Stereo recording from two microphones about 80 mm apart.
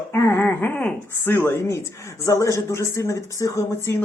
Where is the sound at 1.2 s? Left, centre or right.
Left.